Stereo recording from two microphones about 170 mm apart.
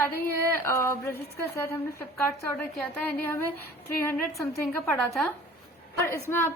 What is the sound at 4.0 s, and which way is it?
A woman's voice, 10° left (ahead or behind).